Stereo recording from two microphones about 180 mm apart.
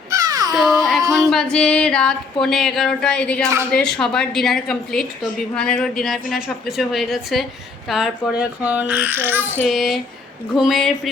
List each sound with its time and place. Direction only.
0.1 s baby cry: 20° right (ahead or behind)
0.5 s a sound: centre (ahead or behind)
1.3 s a woman's voice: 5° left (ahead or behind); by 9.4 s 10° right (ahead or behind)
9.6 s a woman's voice: centre (ahead or behind)